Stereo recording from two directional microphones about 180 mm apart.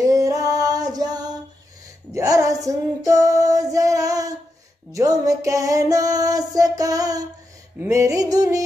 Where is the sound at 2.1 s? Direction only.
20° right (ahead or behind).